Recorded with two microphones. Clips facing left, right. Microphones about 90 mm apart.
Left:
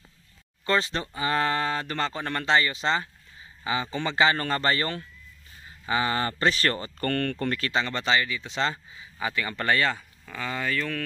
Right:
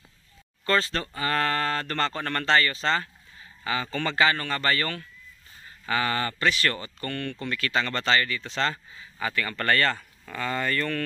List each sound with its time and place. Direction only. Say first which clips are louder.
0.7 s speech: even; 20° left (ahead or behind); by 7.1 s 35° left (ahead or behind)
7.1 s speech: left 5 dB; 50° left (ahead or behind)
7.7 s speech: right 2 dB; 15° left (ahead or behind)